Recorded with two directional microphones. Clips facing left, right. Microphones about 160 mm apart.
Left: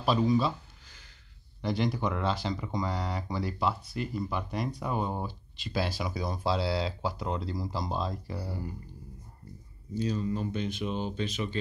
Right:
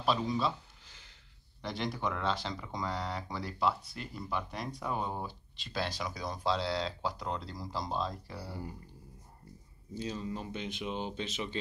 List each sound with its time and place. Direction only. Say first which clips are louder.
0.0 s speech: left 5 dB; centre (ahead or behind)
1.6 s speech: left 6 dB; centre (ahead or behind)
9.9 s speech: left 7 dB; 25° right (ahead or behind)